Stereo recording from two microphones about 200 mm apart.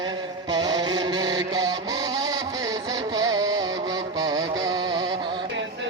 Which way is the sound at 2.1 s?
20° right (ahead or behind).